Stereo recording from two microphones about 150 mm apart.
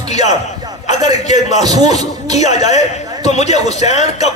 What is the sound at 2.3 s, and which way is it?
A man's voice, 50° left (ahead or behind).